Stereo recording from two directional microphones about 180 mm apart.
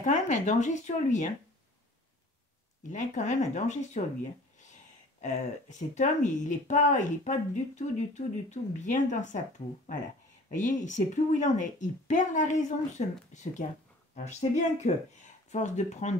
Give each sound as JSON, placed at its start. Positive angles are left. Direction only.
{"t": 0.0, "sound": "speech", "side_deg": 40}
{"t": 2.9, "sound": "speech", "side_deg": 40}
{"t": 5.2, "sound": "speech", "side_deg": 40}
{"t": 10.5, "sound": "speech", "side_deg": 45}